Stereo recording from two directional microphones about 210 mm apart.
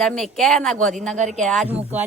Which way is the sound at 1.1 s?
35° right (ahead or behind).